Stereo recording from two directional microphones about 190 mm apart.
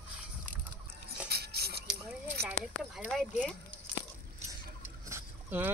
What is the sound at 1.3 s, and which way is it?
Music, 55° right (ahead or behind).